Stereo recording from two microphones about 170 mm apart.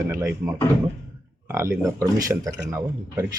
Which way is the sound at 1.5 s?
15° right (ahead or behind).